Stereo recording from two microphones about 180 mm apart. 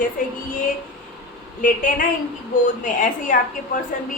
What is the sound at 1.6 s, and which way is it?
A woman's voice, 45° left (ahead or behind).